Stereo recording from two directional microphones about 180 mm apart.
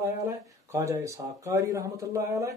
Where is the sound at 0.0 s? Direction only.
15° right (ahead or behind).